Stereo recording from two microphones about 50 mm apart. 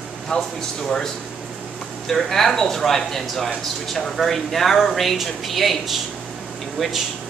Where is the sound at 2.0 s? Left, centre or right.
Centre.